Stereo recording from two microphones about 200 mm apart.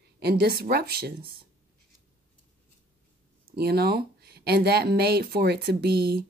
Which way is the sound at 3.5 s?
50° right (ahead or behind).